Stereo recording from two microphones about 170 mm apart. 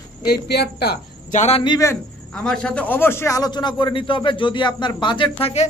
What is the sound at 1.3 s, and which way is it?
Speech, 45° left (ahead or behind).